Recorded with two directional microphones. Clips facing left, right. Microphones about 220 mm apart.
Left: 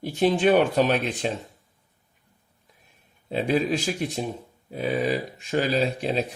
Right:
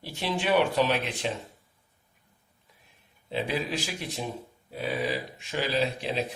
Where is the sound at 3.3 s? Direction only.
45° left (ahead or behind).